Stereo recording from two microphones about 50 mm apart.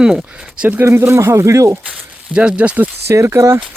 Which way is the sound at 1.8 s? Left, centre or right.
Centre.